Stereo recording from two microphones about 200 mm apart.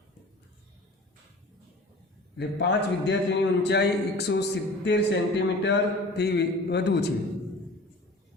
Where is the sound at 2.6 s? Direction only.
60° left (ahead or behind).